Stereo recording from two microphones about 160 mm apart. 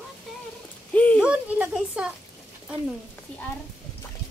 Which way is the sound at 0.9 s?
10° left (ahead or behind).